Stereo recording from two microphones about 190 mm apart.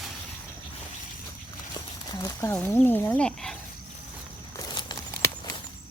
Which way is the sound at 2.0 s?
15° left (ahead or behind).